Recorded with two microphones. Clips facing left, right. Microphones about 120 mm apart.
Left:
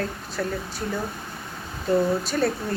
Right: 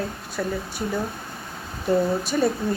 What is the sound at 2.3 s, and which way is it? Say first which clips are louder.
Speech: right 3 dB; 10° right (ahead or behind).